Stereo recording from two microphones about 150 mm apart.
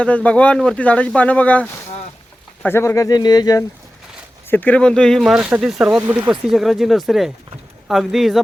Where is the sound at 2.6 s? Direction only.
15° left (ahead or behind).